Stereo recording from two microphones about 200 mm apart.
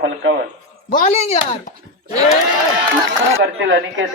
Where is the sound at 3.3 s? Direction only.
75° right (ahead or behind).